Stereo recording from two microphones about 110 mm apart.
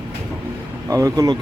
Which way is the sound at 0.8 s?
30° right (ahead or behind).